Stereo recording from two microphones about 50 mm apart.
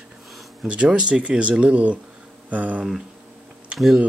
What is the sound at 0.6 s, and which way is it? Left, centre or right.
Speech, right.